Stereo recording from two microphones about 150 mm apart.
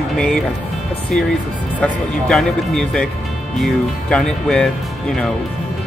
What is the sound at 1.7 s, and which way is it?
Speech, 5° left (ahead or behind).